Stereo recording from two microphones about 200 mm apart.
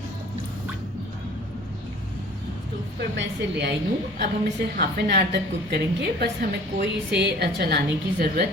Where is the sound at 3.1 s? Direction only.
60° right (ahead or behind).